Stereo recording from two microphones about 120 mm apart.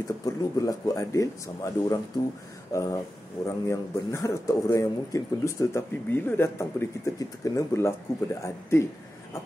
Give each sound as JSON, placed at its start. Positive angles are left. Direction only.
{"t": 0.2, "sound": "speech", "side_deg": 30}